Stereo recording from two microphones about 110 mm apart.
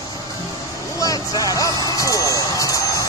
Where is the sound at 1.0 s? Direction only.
35° left (ahead or behind).